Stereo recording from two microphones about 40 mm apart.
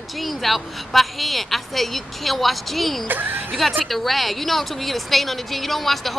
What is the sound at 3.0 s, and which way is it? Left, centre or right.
Speech, right.